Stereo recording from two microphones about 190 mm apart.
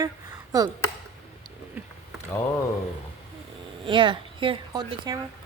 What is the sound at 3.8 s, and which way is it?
A woman's voice, 25° right (ahead or behind).